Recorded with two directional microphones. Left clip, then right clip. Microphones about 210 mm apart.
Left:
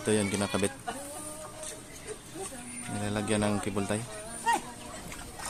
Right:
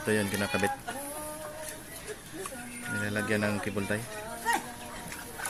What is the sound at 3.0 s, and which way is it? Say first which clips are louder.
Speech: even; 15° left (ahead or behind).